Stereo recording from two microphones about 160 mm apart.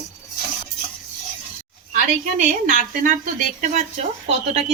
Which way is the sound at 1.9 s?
55° right (ahead or behind).